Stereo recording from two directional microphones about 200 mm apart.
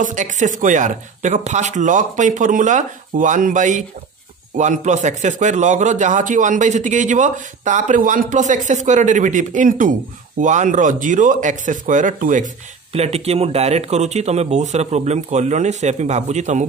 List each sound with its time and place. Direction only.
0.0 s a man's voice: 40° right (ahead or behind)